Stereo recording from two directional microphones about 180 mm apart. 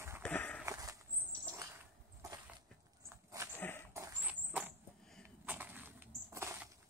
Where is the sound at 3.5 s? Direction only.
10° left (ahead or behind).